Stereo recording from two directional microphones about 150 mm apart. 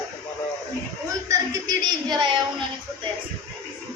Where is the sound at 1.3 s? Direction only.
25° right (ahead or behind).